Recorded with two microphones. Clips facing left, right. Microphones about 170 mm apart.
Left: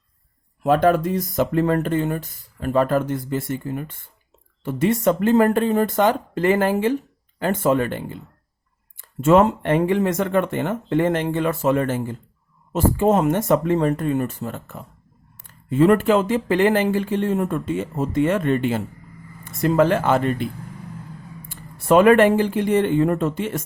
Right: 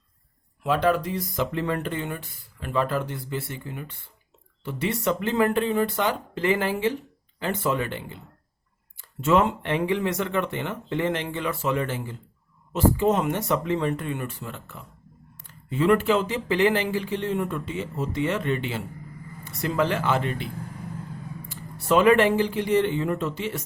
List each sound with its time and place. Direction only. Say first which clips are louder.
0.6 s speech: left 6 dB; 45° left (ahead or behind)
21.5 s speech: left 6 dB; 50° left (ahead or behind)